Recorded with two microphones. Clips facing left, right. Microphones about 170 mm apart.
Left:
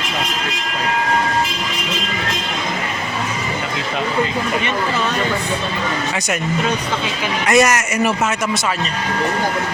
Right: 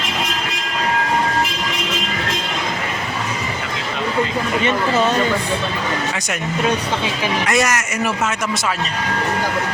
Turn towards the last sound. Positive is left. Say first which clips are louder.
# left 4 dB
turn(degrees=20)  # may be behind; listen again after turning